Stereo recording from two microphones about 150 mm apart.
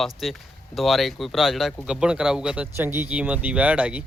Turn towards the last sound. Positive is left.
turn(degrees=-10)  # may be behind; listen again after turning